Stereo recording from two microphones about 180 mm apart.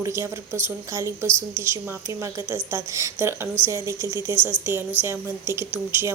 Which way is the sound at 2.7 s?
15° right (ahead or behind).